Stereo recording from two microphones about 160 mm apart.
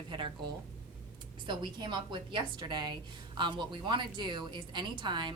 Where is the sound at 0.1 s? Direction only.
30° right (ahead or behind).